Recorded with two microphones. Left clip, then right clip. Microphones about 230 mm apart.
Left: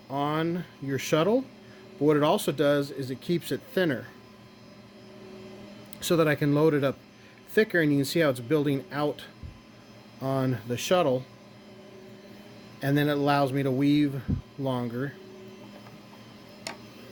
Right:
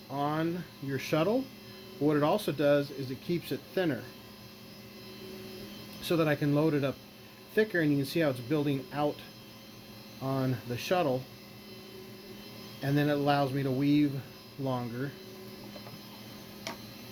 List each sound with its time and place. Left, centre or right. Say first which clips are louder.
0.1 s a sound: left 4 dB; left
0.9 s speech: left 5 dB; left
6.0 s speech: left 5 dB; left
10.2 s speech: left 5 dB; left
12.8 s speech: left 3 dB; left